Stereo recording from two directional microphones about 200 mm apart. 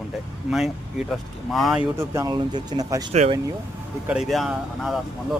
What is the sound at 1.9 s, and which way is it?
Speech, 15° right (ahead or behind).